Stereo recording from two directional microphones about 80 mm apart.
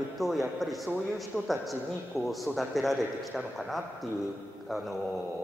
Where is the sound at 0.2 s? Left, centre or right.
Centre.